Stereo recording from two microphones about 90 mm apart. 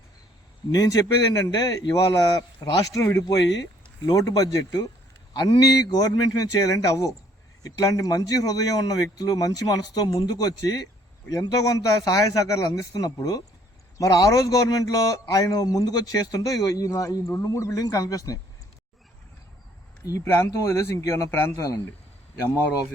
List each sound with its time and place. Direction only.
0.7 s a man's voice: 45° left (ahead or behind)
20.2 s a man's voice: 30° left (ahead or behind)